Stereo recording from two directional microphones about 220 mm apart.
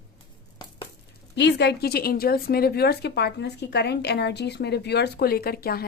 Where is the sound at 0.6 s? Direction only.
20° left (ahead or behind).